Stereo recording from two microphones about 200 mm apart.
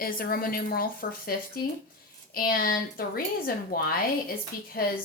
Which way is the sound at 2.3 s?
45° left (ahead or behind).